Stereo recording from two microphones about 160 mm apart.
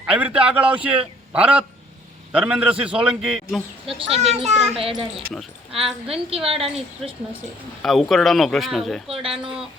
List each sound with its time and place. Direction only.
0.1 s a man's voice: 10° right (ahead or behind)
3.8 s a woman's voice: 35° right (ahead or behind)
6.1 s a woman's voice: 35° right (ahead or behind)
7.8 s speech: centre (ahead or behind)
9.0 s a woman's voice: 35° right (ahead or behind)